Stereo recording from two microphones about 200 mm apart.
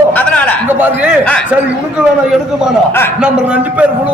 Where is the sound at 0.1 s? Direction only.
5° left (ahead or behind).